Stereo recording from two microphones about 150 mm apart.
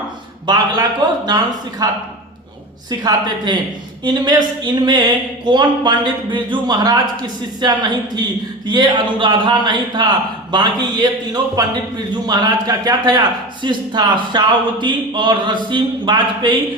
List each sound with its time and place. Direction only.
0.4 s speech: 30° right (ahead or behind)
3.0 s speech: 25° right (ahead or behind)